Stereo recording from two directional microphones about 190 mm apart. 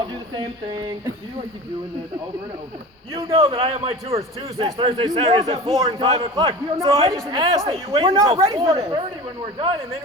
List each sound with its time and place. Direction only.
0.0 s speech: 20° right (ahead or behind)
3.2 s a man's voice: 30° right (ahead or behind)